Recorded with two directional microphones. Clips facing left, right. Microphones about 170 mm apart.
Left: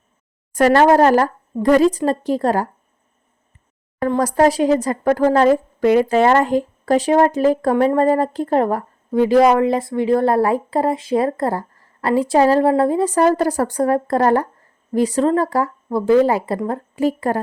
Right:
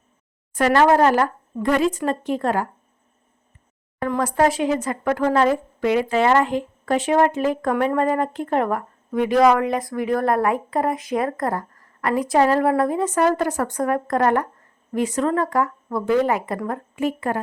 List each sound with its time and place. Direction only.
0.5 s speech: 40° left (ahead or behind)
4.0 s speech: 40° left (ahead or behind)